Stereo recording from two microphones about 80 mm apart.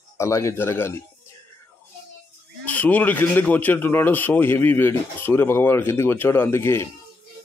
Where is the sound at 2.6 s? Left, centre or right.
Centre.